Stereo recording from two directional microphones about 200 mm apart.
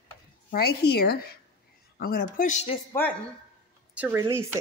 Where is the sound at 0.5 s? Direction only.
50° left (ahead or behind); by 2.8 s 35° left (ahead or behind).